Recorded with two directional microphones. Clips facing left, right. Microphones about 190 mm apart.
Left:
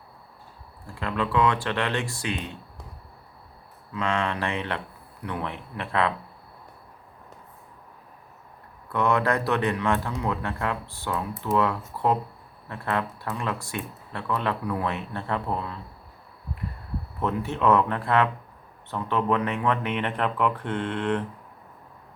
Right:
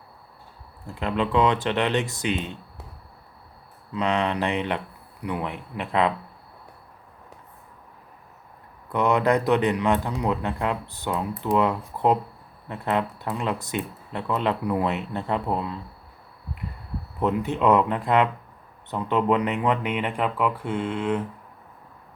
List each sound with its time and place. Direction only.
0.9 s speech: 20° right (ahead or behind)
3.9 s a man's voice: 20° right (ahead or behind)
8.9 s a man's voice: 15° right (ahead or behind)
17.2 s a man's voice: 15° right (ahead or behind)